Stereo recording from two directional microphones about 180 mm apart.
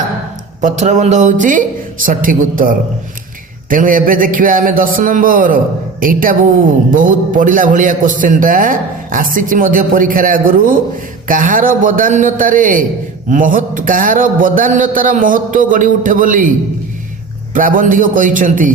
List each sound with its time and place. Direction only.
0.6 s a man's voice: 40° right (ahead or behind)
17.5 s a man's voice: 50° right (ahead or behind)